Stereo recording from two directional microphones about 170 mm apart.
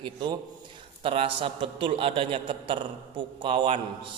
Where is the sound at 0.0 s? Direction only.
25° right (ahead or behind).